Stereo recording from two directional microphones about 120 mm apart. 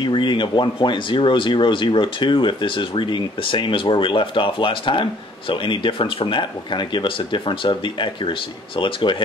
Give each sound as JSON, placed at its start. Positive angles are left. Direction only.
{"t": 0.0, "sound": "speech", "side_deg": 40}